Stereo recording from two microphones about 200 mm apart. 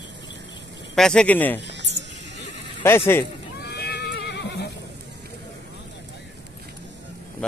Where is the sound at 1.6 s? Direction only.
60° right (ahead or behind).